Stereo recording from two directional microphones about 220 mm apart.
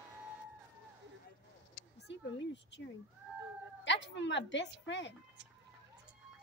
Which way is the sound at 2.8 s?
50° left (ahead or behind).